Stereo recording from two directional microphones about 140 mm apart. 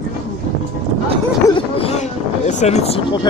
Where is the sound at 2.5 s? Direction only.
55° left (ahead or behind).